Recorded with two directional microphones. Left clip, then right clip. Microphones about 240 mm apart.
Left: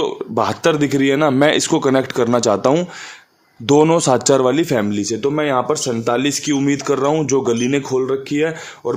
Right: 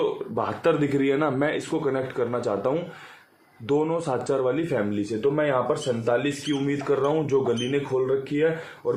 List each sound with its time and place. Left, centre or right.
0.3 s speech: left